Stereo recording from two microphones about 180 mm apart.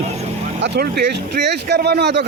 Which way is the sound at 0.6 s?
70° right (ahead or behind).